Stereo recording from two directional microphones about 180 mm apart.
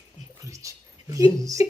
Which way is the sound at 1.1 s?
20° right (ahead or behind).